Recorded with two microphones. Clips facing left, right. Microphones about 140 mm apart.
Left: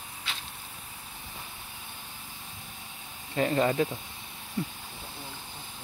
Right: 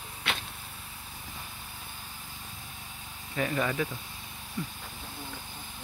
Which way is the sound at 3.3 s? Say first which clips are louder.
Left 4 dB; 30° left (ahead or behind).